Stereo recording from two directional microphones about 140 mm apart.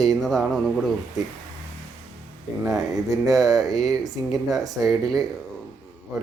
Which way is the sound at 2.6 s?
Centre (ahead or behind).